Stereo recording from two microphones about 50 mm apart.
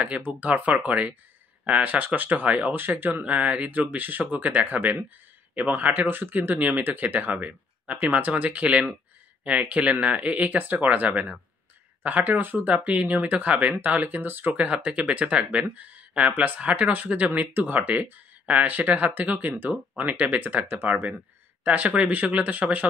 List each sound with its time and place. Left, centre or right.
0.2 s speech: right
3.2 s speech: right
14.5 s speech: right
19.7 s speech: centre
20.2 s speech: right